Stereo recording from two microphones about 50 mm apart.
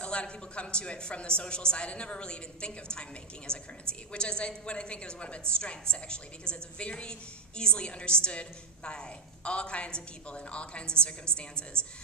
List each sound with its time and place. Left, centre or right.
0.0 s a woman's voice: left